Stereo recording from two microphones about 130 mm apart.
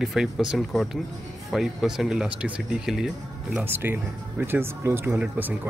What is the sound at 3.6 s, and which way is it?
Speech, 15° right (ahead or behind).